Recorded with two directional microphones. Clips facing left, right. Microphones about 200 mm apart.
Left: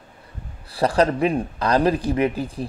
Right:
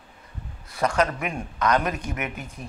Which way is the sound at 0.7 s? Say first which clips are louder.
Left 5 dB; 35° left (ahead or behind).